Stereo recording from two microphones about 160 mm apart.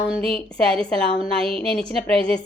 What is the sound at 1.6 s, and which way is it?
Speech, 35° right (ahead or behind).